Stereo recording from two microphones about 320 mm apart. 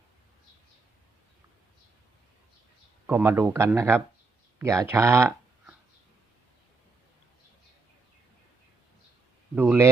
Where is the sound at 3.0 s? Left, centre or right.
Centre.